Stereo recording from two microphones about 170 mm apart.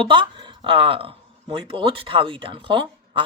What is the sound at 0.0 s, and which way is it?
Speech, 30° right (ahead or behind).